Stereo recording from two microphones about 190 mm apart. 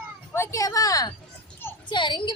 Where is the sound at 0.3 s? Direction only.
15° left (ahead or behind).